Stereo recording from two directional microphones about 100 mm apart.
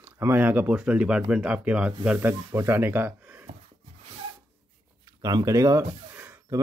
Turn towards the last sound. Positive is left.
turn(degrees=-20)  # may be behind; listen again after turning